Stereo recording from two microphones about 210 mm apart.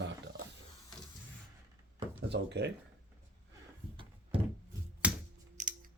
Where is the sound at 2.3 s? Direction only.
55° right (ahead or behind).